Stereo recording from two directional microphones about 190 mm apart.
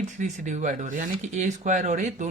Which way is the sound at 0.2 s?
40° right (ahead or behind).